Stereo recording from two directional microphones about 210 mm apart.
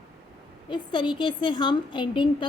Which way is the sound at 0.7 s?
25° left (ahead or behind).